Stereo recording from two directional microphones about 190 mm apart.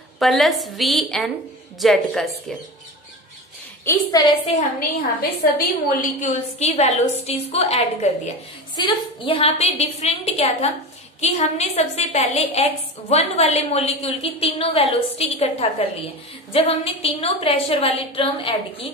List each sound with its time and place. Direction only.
0.2 s a woman's voice: centre (ahead or behind)
3.8 s a woman's voice: 20° left (ahead or behind)
4.5 s a woman's voice: 40° left (ahead or behind)
5.9 s a woman's voice: 40° left (ahead or behind)